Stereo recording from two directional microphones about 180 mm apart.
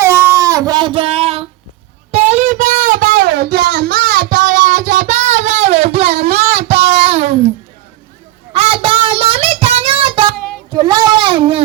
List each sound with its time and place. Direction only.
0.0 s music: 15° right (ahead or behind); by 1.5 s 30° right (ahead or behind)
2.1 s a sound: 40° right (ahead or behind)
8.5 s child singing: 35° right (ahead or behind)